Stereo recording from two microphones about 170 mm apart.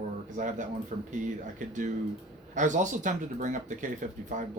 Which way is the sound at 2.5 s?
45° right (ahead or behind).